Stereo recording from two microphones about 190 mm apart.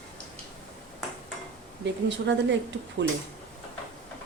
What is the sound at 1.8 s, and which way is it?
Speech, 70° right (ahead or behind).